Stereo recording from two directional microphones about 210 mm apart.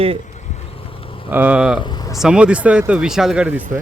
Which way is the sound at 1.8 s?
20° left (ahead or behind).